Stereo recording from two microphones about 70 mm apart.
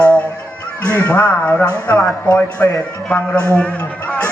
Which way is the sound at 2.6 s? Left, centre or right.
Left.